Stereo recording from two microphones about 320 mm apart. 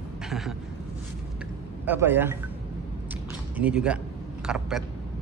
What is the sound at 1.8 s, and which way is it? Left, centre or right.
Speech, centre.